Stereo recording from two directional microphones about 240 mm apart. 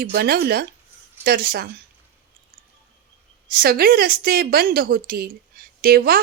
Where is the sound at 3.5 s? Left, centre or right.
Right.